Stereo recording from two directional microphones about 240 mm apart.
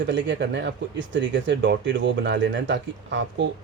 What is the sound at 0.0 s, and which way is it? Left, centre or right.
Speech, right.